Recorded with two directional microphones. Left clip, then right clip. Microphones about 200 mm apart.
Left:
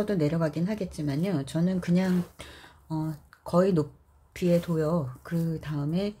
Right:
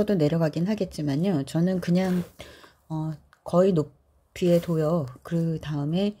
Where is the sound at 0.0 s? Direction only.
30° right (ahead or behind).